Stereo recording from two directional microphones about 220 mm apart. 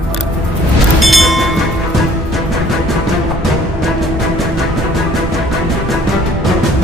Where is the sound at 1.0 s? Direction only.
Centre (ahead or behind).